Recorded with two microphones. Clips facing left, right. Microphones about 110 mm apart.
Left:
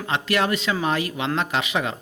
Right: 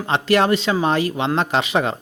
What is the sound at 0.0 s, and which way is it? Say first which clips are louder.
Speech: right 6 dB; 35° right (ahead or behind).